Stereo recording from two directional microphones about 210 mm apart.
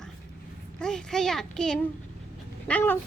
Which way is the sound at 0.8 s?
5° left (ahead or behind).